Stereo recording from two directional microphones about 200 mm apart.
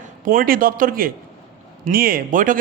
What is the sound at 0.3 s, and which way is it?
A man's voice, 45° right (ahead or behind).